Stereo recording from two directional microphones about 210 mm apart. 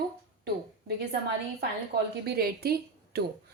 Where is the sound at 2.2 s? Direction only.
50° right (ahead or behind).